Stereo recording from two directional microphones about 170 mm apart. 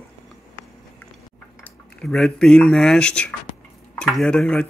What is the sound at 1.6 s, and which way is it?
Speech, 5° left (ahead or behind).